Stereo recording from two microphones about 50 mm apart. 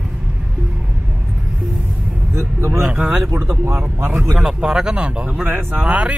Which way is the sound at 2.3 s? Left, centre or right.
Right.